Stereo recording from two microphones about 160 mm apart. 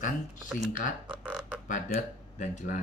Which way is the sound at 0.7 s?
55° left (ahead or behind).